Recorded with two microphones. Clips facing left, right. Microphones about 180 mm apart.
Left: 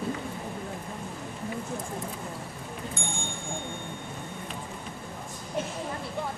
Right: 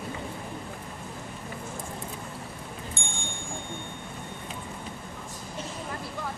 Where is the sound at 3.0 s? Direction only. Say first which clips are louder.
Left 3 dB; 25° right (ahead or behind).